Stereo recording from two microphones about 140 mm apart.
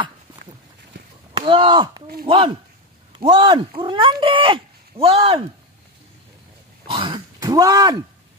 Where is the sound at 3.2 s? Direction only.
35° right (ahead or behind).